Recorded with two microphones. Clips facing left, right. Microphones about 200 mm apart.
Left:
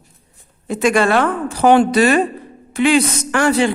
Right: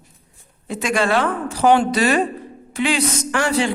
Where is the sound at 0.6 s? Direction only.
50° left (ahead or behind).